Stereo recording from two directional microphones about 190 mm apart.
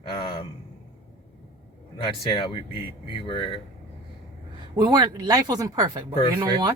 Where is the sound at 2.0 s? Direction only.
25° left (ahead or behind).